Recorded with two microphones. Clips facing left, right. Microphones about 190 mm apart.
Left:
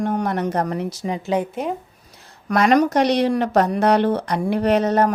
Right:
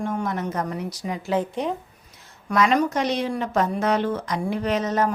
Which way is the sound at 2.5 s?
70° left (ahead or behind).